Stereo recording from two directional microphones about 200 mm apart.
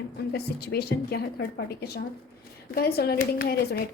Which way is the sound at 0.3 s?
55° left (ahead or behind).